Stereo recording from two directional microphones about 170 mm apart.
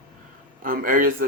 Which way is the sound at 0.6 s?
55° right (ahead or behind).